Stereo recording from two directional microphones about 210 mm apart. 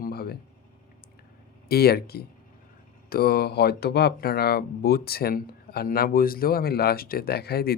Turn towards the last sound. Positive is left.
turn(degrees=50)  # may be behind; listen again after turning